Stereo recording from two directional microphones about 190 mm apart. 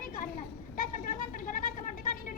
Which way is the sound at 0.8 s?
45° left (ahead or behind).